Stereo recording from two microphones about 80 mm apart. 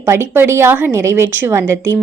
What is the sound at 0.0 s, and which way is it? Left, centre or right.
A woman's voice, right.